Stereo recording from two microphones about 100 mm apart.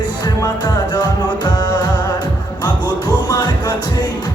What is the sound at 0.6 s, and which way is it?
Music, 45° left (ahead or behind).